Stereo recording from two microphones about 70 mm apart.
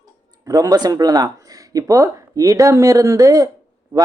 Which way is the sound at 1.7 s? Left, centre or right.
Right.